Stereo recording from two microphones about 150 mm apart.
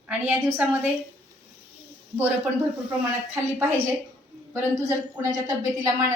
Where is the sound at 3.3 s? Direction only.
15° right (ahead or behind).